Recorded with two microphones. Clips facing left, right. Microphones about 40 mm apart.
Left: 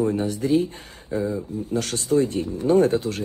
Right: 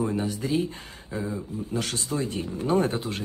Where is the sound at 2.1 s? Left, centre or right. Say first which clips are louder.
Left 10 dB; right.